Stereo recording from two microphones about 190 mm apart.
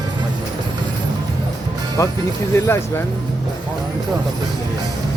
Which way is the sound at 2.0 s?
15° left (ahead or behind).